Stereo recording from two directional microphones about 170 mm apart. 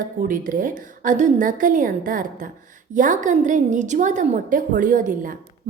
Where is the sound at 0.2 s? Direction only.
55° right (ahead or behind).